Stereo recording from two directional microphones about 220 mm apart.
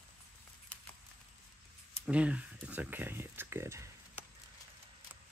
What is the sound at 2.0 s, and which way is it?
Speech, 5° right (ahead or behind).